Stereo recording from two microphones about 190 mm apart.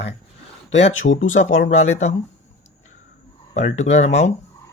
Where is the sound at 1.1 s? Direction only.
90° left.